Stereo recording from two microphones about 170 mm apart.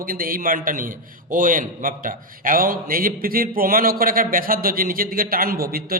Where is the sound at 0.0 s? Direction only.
55° right (ahead or behind).